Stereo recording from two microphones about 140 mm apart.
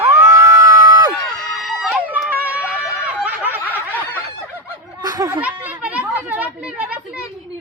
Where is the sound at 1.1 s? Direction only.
Centre (ahead or behind).